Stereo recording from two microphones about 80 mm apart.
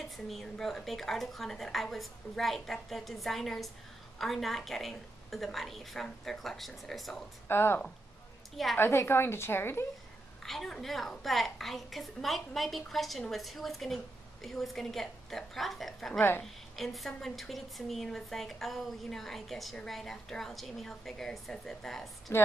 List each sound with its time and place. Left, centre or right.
0.0 s a woman's voice: centre
7.4 s a woman's voice: left
10.4 s a woman's voice: centre
16.2 s speech: left
16.4 s a woman's voice: centre